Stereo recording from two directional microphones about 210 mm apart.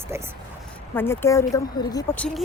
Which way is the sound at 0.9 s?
10° left (ahead or behind).